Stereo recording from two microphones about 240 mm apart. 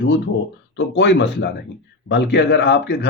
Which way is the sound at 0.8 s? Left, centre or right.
Left.